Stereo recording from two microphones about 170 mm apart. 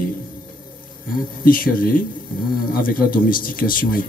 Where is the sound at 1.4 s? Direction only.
55° left (ahead or behind).